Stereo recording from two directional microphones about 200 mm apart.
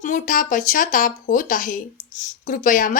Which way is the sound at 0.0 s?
40° left (ahead or behind).